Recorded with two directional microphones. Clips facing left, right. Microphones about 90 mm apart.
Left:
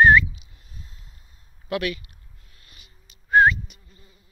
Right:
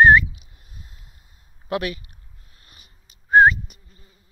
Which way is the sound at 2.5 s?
40° right (ahead or behind).